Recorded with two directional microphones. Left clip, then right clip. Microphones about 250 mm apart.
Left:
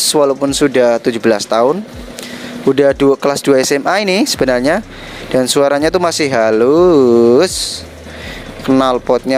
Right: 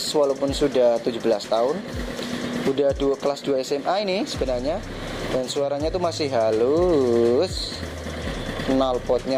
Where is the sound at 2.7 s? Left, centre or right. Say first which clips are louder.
Left 12 dB; left.